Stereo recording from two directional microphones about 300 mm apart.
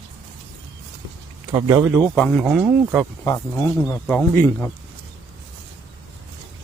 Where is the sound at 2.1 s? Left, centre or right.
Centre.